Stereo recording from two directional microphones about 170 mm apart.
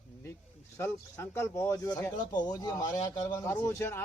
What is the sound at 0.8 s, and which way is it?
Speech, 15° left (ahead or behind).